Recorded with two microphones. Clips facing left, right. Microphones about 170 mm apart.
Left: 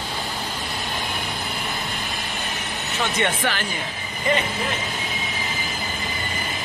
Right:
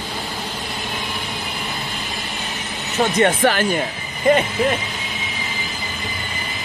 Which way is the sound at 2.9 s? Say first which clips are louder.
Right 7 dB; 40° right (ahead or behind).